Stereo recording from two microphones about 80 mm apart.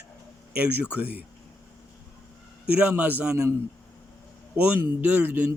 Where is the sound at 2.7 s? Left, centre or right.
Centre.